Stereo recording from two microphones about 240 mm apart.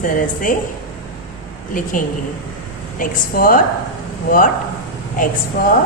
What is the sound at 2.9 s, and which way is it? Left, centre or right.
A woman's voice, left.